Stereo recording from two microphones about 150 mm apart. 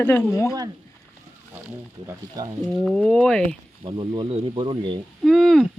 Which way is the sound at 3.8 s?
30° right (ahead or behind).